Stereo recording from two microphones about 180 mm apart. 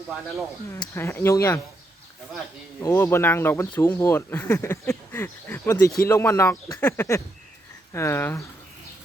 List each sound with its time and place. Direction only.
0.9 s speech: 15° left (ahead or behind)
2.8 s speech: 15° left (ahead or behind)